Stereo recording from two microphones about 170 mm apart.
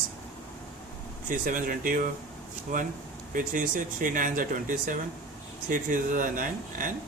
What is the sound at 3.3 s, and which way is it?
Speech, 55° right (ahead or behind).